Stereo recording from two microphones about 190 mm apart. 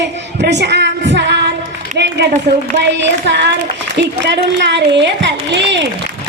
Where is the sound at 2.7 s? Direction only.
65° right (ahead or behind).